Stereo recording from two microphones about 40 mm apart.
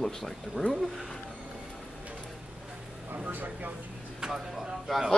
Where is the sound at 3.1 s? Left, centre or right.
Right.